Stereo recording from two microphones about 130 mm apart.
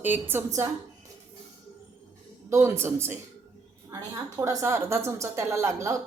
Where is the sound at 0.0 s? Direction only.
15° right (ahead or behind).